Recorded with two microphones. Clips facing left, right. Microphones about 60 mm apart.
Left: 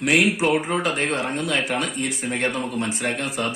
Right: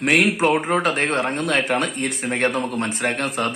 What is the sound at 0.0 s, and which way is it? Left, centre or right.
A man's voice, right.